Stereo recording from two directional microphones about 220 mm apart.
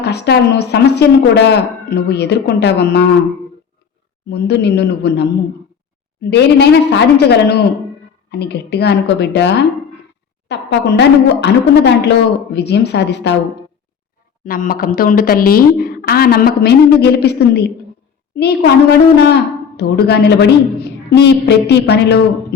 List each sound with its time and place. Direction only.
0.0 s a woman's voice: 50° left (ahead or behind)
4.3 s a woman's voice: 50° left (ahead or behind)
6.3 s a woman's voice: 50° left (ahead or behind)
14.4 s a woman's voice: 40° left (ahead or behind)